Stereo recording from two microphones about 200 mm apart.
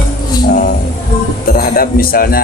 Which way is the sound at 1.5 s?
45° left (ahead or behind).